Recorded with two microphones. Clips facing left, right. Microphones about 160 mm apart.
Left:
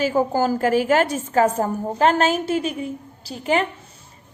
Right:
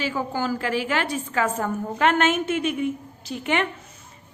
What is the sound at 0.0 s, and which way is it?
A woman's voice, 40° left (ahead or behind).